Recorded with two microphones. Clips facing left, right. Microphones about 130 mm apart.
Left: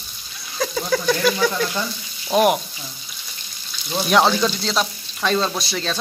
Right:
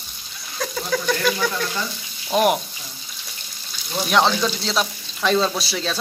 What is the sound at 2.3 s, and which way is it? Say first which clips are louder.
Frying: left 2 dB; centre (ahead or behind).